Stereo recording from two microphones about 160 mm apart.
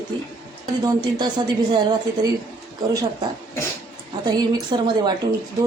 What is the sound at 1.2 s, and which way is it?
A woman's voice, 30° right (ahead or behind).